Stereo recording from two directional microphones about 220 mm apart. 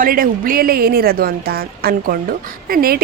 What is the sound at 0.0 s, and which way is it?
A woman's voice, 40° right (ahead or behind).